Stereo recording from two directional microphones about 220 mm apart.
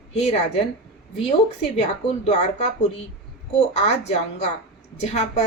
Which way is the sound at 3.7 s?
30° left (ahead or behind).